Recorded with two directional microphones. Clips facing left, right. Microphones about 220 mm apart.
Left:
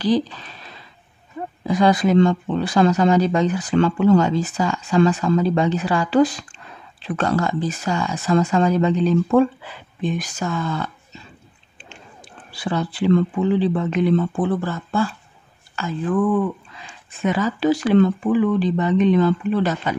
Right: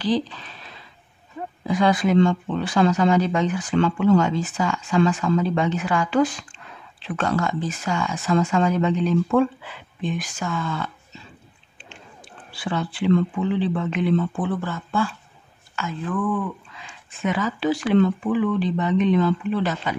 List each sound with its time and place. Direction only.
1.7 s speech: 40° left (ahead or behind)
12.5 s speech: 40° left (ahead or behind)